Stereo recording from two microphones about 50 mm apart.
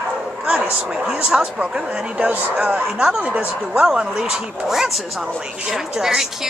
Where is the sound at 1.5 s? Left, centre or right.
Centre.